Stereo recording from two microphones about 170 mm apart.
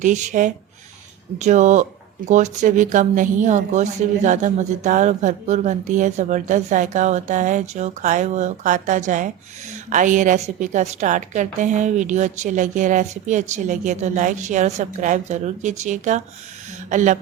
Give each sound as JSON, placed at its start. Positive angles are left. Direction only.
{"t": 0.0, "sound": "speech", "side_deg": -45}